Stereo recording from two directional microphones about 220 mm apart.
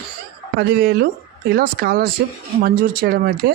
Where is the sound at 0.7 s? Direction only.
45° right (ahead or behind).